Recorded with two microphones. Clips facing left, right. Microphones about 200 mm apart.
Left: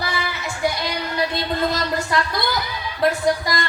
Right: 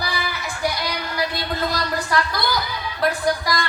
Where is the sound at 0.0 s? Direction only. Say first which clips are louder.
Left 1 dB; 25° left (ahead or behind).